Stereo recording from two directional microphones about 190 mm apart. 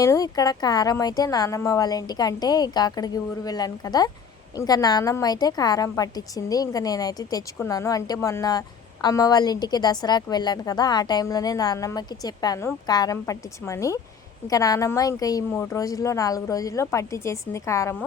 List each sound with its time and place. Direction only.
0.0 s a woman's voice: 15° left (ahead or behind)